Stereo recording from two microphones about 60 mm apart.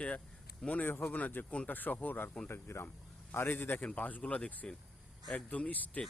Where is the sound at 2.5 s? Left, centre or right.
Left.